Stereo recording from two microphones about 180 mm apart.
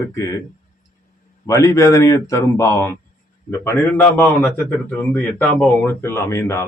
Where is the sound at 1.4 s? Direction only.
15° left (ahead or behind).